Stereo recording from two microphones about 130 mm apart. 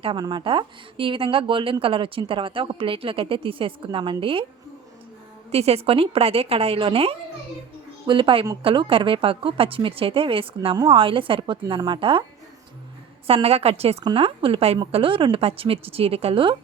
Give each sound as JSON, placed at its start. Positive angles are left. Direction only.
{"t": 0.0, "sound": "speech", "side_deg": -40}
{"t": 5.5, "sound": "a woman's voice", "side_deg": -50}
{"t": 13.2, "sound": "speech", "side_deg": -50}
{"t": 14.0, "sound": "speech", "side_deg": -40}